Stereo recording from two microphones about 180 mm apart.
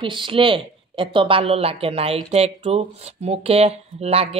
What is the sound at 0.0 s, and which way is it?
Speech, 25° right (ahead or behind).